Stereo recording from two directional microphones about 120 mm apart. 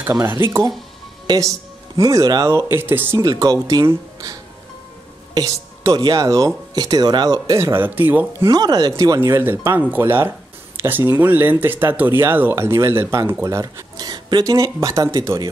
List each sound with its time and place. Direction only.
0.1 s speech: 20° right (ahead or behind)
1.2 s speech: 35° right (ahead or behind); by 3.2 s 15° right (ahead or behind)
3.2 s speech: 30° right (ahead or behind); by 8.5 s 15° right (ahead or behind)
8.5 s speech: 35° right (ahead or behind)